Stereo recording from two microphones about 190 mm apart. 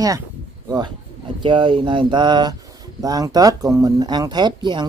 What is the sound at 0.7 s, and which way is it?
Speech, 20° right (ahead or behind).